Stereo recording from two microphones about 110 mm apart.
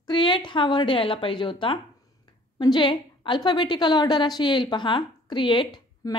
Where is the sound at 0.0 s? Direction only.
45° left (ahead or behind).